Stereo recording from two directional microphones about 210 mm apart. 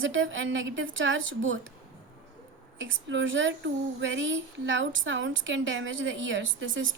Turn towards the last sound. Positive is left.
turn(degrees=-65)  # may be behind; listen again after turning